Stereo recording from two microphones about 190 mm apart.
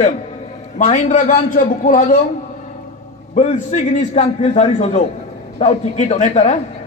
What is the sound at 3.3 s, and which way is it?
A man's voice, 40° left (ahead or behind).